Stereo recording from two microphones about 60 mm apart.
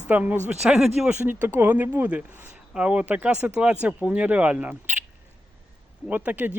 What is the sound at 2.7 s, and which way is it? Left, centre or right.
Speech, centre.